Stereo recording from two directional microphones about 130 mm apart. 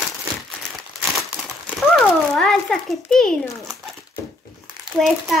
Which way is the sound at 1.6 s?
5° left (ahead or behind).